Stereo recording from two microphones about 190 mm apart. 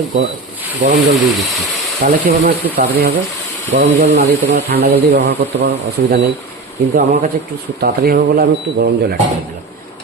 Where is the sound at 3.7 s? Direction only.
40° right (ahead or behind).